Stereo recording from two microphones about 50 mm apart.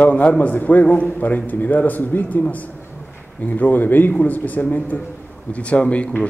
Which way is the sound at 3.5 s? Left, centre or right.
Left.